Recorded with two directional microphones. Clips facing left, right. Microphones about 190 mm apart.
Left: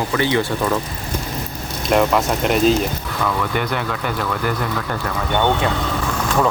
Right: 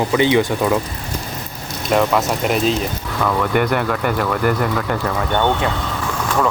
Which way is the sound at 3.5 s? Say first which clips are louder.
Right 5 dB; 55° right (ahead or behind).